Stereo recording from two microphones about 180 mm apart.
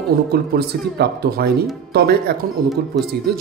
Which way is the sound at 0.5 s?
65° right (ahead or behind).